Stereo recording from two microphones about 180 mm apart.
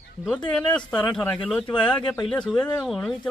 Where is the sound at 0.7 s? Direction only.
5° left (ahead or behind).